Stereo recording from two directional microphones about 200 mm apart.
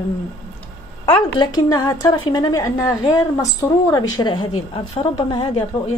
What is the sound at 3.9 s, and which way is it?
A woman's voice, 20° left (ahead or behind).